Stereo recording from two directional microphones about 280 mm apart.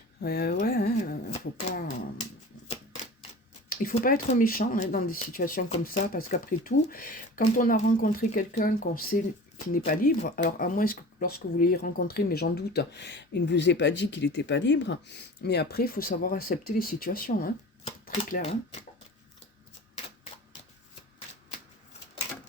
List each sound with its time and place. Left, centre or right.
0.2 s speech: left
3.7 s speech: left